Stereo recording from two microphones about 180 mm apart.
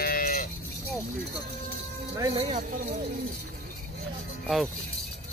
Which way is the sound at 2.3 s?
35° right (ahead or behind).